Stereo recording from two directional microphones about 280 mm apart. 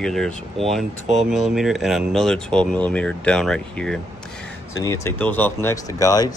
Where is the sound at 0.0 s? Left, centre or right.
Centre.